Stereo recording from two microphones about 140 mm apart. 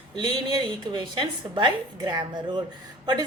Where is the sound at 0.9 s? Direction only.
30° right (ahead or behind).